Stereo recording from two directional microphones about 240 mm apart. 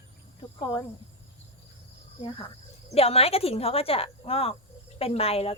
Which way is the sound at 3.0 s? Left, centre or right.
Left.